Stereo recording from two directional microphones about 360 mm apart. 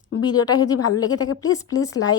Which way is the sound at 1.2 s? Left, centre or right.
Left.